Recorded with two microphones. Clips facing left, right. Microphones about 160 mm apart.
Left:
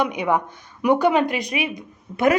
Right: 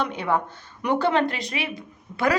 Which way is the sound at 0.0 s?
15° left (ahead or behind).